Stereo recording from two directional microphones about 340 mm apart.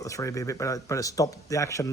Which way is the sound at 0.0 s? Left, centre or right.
Centre.